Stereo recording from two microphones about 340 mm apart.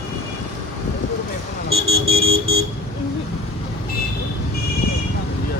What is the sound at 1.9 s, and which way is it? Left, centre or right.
Vehicle, centre.